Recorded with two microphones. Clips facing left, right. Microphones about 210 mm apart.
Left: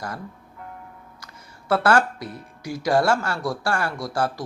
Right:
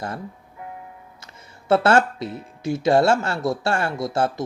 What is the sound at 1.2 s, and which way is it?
Speech, 25° right (ahead or behind).